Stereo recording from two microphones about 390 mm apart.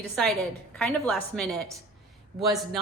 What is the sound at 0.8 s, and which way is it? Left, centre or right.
A woman's voice, centre.